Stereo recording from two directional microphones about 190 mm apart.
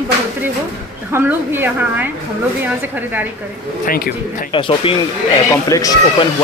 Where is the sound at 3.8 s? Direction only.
50° left (ahead or behind).